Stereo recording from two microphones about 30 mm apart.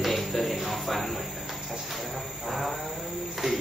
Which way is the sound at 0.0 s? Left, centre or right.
Centre.